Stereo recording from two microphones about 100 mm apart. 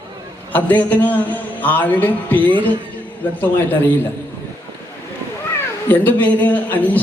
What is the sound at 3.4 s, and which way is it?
Speech, 20° left (ahead or behind).